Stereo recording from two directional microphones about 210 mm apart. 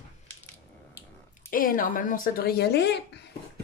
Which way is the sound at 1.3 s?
40° left (ahead or behind).